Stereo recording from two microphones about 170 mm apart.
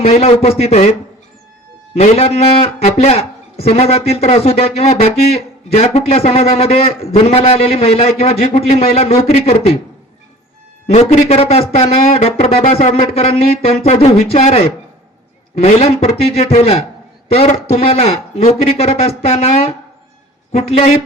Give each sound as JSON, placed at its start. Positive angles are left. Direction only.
{"t": 0.0, "sound": "a man's voice", "side_deg": 35}
{"t": 2.0, "sound": "a man's voice", "side_deg": 35}
{"t": 10.8, "sound": "a man's voice", "side_deg": 40}